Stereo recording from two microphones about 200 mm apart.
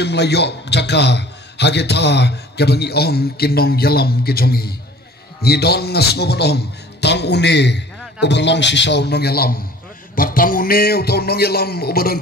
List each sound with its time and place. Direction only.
0.0 s a man's voice: 55° left (ahead or behind)